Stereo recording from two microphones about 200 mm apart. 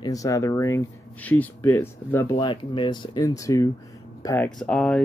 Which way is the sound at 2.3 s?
25° left (ahead or behind).